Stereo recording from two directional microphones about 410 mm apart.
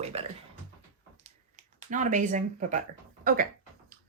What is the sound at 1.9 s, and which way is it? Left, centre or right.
Speech, centre.